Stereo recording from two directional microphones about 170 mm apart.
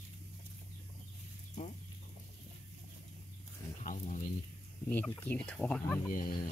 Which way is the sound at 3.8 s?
50° left (ahead or behind).